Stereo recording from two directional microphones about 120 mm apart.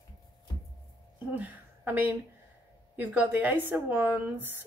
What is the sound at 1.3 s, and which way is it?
Speech, 15° right (ahead or behind).